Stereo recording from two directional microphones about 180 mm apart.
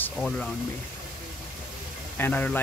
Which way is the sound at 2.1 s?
10° left (ahead or behind).